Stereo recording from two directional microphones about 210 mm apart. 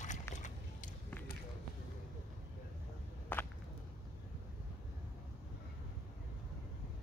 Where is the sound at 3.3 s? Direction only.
10° left (ahead or behind).